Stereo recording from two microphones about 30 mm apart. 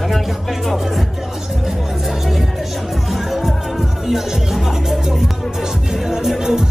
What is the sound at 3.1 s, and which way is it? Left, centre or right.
Music, centre.